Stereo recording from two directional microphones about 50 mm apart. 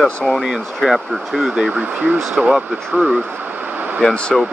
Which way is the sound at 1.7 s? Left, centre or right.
Right.